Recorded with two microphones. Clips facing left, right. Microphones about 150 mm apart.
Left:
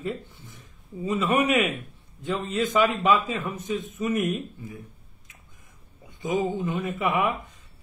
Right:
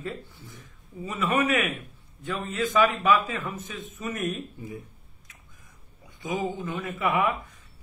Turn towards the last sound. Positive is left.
turn(degrees=20)  # may be behind; listen again after turning